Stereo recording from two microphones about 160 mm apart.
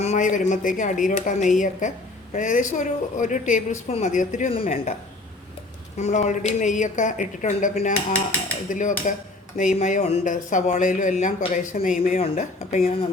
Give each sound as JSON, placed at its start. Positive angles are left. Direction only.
{"t": 0.0, "sound": "speech", "side_deg": 50}
{"t": 6.0, "sound": "speech", "side_deg": 45}